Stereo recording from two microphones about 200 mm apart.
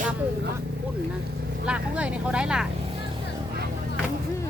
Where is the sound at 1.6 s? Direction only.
5° right (ahead or behind).